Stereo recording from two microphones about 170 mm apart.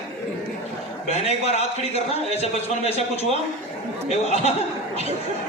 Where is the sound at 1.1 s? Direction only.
35° left (ahead or behind).